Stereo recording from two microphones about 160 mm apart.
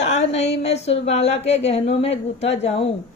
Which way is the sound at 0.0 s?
45° left (ahead or behind).